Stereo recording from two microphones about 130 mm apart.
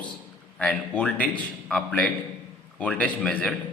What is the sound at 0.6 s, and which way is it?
A man's voice, 10° left (ahead or behind).